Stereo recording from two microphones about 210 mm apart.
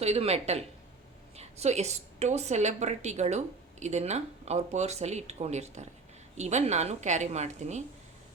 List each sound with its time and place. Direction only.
0.0 s a woman's voice: 30° right (ahead or behind)